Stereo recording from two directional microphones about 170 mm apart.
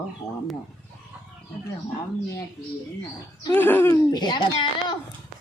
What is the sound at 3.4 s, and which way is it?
Speech, 10° left (ahead or behind).